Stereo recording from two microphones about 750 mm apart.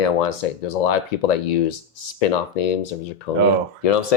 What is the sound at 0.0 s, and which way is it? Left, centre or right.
Speech, left.